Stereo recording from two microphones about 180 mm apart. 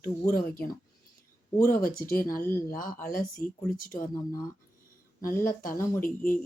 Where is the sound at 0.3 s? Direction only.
55° left (ahead or behind).